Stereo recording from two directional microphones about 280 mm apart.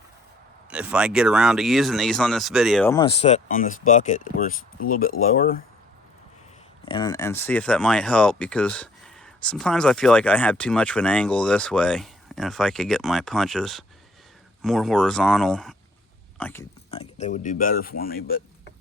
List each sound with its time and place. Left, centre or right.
0.7 s speech: centre
2.9 s speech: centre
5.1 s speech: left
5.4 s speech: left
6.8 s speech: centre
16.9 s speech: left